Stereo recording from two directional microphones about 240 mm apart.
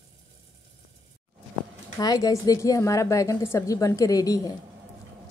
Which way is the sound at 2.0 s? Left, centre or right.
Centre.